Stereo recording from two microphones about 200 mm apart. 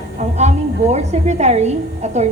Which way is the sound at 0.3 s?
35° right (ahead or behind).